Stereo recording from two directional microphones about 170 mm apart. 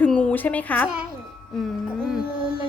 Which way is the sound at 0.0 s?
5° left (ahead or behind).